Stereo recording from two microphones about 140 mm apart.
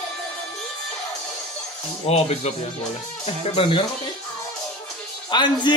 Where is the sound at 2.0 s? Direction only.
50° left (ahead or behind).